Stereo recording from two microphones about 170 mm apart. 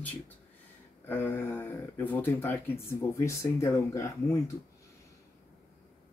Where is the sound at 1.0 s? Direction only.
10° left (ahead or behind).